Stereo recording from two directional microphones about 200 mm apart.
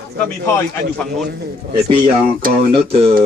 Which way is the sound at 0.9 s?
Centre (ahead or behind).